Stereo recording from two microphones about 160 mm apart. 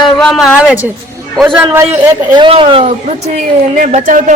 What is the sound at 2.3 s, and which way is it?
Speech, 30° right (ahead or behind).